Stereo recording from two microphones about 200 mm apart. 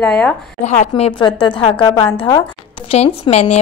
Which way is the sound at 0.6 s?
35° left (ahead or behind).